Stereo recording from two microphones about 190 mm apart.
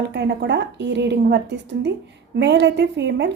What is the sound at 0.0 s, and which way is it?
A woman's voice, 65° right (ahead or behind).